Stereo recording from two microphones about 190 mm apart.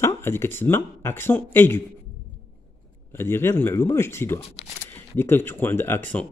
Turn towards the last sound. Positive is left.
turn(degrees=10)  # may be behind; listen again after turning